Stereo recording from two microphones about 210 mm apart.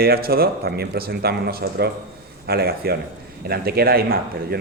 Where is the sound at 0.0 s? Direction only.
45° right (ahead or behind).